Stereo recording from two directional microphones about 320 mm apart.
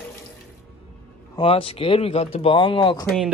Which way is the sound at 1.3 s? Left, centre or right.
Centre.